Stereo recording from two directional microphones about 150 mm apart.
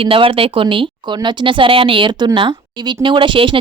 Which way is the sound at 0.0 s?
35° right (ahead or behind).